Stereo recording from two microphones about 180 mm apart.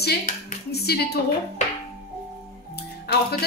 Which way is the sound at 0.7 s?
65° left (ahead or behind).